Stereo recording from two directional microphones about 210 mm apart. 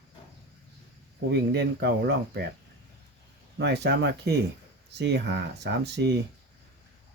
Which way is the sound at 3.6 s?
55° right (ahead or behind).